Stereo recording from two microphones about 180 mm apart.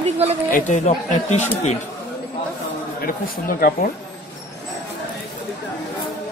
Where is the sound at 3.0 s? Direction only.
50° left (ahead or behind).